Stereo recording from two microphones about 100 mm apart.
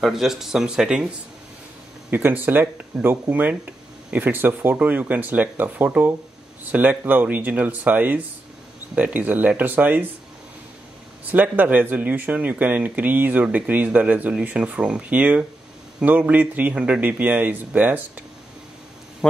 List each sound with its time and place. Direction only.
0.0 s speech: 5° right (ahead or behind)
2.0 s speech: 20° right (ahead or behind)
11.3 s speech: 20° right (ahead or behind)